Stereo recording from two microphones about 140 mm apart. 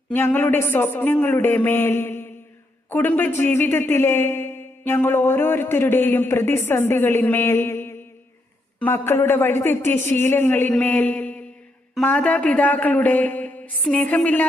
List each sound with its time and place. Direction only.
0.1 s a man's voice: 15° left (ahead or behind)